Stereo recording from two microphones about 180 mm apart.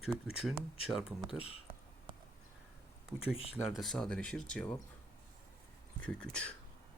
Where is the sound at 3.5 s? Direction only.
Centre (ahead or behind).